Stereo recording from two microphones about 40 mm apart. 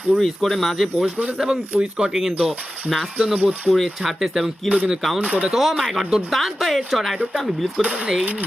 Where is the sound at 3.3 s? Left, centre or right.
Right.